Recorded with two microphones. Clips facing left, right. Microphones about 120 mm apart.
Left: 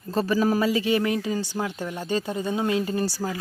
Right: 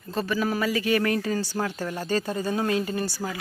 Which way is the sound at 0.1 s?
35° left (ahead or behind).